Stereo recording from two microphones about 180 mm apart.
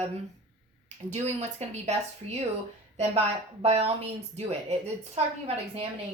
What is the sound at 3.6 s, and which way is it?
Speech, 35° right (ahead or behind).